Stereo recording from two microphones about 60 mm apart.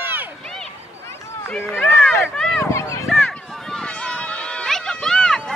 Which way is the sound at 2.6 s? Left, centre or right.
Left.